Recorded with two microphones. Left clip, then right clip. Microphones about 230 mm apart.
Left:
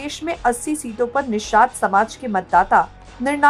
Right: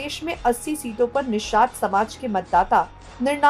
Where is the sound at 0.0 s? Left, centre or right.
Centre.